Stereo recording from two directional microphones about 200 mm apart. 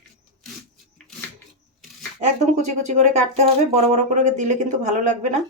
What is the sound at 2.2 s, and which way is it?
Speech, 35° right (ahead or behind).